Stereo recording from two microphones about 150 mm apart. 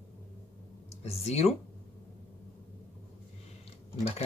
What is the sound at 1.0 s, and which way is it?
Speech, 45° left (ahead or behind).